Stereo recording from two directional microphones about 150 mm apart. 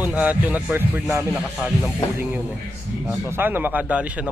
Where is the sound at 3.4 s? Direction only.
10° right (ahead or behind).